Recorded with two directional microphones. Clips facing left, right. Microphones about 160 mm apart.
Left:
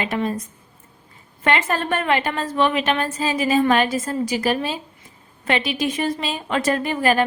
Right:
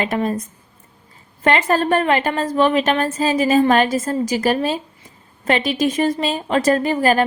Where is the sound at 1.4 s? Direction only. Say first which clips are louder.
Right 4 dB; 40° right (ahead or behind).